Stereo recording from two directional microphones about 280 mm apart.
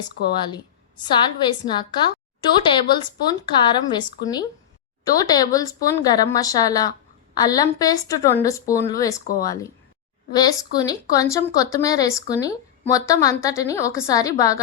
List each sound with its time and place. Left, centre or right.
0.3 s speech: centre
10.8 s speech: centre